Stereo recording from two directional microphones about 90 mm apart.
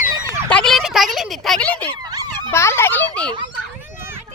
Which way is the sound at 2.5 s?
30° left (ahead or behind).